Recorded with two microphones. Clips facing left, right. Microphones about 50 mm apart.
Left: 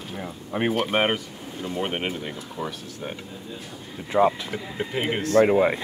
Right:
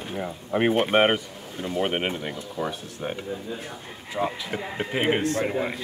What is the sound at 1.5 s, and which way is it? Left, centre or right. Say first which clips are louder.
Speech: right 2 dB; right.